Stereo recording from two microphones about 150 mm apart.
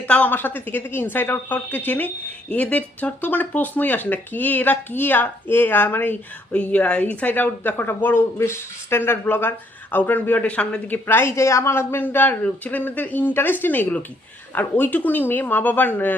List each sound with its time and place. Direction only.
0.1 s a woman's voice: 10° left (ahead or behind)